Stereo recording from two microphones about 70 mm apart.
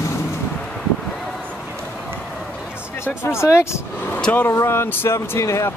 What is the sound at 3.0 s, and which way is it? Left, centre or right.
Speech, left.